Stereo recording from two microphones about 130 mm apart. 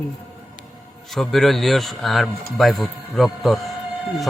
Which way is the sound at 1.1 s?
Centre (ahead or behind).